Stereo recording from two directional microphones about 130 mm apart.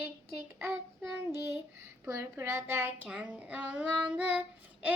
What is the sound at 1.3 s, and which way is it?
A child's voice, 20° right (ahead or behind).